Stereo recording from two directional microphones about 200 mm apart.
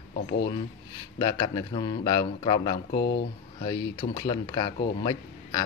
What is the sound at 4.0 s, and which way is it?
A man's voice, 20° left (ahead or behind).